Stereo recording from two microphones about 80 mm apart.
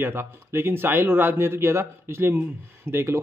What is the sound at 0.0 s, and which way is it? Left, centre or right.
Speech, right.